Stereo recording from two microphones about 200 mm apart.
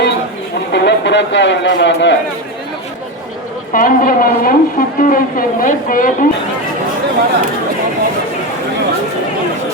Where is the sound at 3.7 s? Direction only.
45° left (ahead or behind).